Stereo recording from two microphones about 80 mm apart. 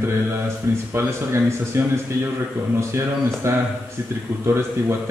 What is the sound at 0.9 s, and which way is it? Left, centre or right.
Speech, right.